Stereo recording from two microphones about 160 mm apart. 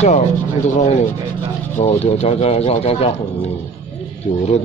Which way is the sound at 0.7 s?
45° left (ahead or behind).